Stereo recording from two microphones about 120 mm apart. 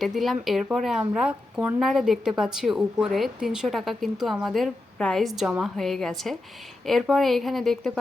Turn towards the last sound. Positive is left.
turn(degrees=0)  # may be behind; listen again after turning